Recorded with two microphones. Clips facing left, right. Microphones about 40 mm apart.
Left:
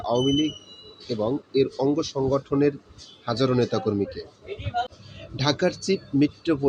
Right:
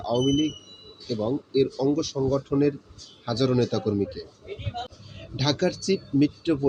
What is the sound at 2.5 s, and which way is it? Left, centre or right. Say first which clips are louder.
Speech: left 1 dB; left.